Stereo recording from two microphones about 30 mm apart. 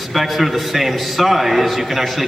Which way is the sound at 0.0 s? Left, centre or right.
Centre.